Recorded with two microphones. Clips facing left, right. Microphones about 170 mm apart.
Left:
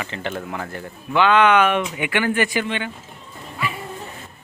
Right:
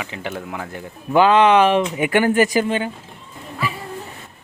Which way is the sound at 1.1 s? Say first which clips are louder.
Right 3 dB; 35° right (ahead or behind).